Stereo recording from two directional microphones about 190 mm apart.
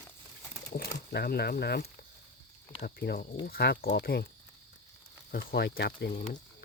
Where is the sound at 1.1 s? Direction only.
55° left (ahead or behind).